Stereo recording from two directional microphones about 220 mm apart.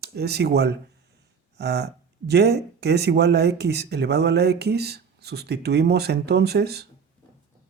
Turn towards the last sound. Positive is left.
turn(degrees=-45)  # may be behind; listen again after turning